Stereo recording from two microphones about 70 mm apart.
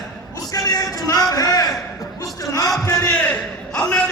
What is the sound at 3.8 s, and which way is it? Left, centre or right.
Speech, centre.